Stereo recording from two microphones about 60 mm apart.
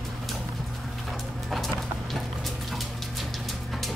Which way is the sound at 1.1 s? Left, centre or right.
Centre.